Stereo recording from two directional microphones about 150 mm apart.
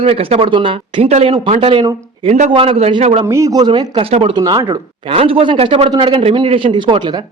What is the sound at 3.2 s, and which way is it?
Speech, 20° right (ahead or behind).